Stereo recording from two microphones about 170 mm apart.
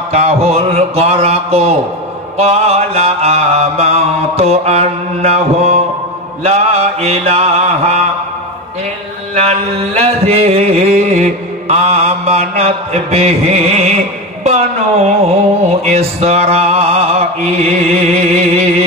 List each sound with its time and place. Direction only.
0.1 s music: 40° right (ahead or behind)
9.3 s music: 40° right (ahead or behind)
14.4 s speech: 40° right (ahead or behind)
15.8 s music: 40° right (ahead or behind)